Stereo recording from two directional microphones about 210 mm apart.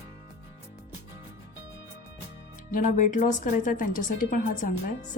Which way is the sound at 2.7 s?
40° left (ahead or behind).